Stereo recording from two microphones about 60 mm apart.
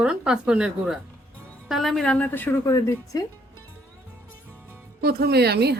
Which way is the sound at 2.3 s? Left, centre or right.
Left.